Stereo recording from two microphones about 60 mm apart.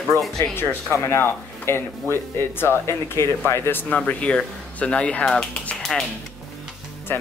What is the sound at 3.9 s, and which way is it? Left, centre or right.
Speech, left.